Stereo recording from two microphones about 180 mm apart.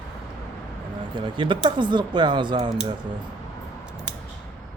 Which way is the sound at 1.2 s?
25° right (ahead or behind).